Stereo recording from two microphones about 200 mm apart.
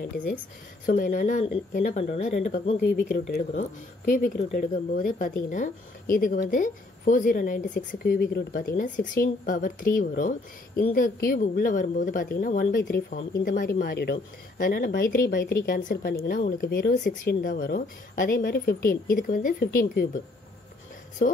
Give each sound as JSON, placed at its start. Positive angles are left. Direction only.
{"t": 0.8, "sound": "speech", "side_deg": 40}
{"t": 2.8, "sound": "speech", "side_deg": 45}
{"t": 13.4, "sound": "speech", "side_deg": 55}